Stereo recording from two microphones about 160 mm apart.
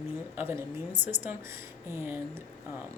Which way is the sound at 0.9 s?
30° right (ahead or behind).